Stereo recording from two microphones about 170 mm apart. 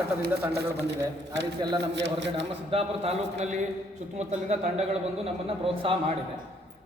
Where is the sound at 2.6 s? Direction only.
35° right (ahead or behind).